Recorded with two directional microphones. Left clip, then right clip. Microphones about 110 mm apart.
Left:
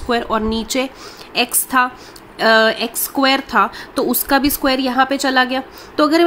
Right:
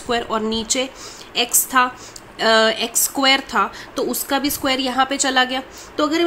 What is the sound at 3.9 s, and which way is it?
Speech, 60° left (ahead or behind).